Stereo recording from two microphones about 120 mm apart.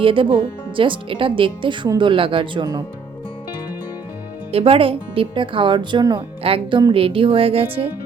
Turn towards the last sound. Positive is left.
turn(degrees=-50)  # may be behind; listen again after turning